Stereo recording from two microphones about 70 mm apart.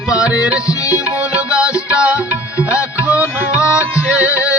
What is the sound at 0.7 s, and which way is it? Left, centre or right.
Music, left.